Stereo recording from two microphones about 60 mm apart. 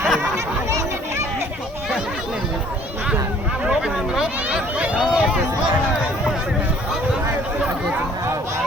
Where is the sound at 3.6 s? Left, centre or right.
Centre.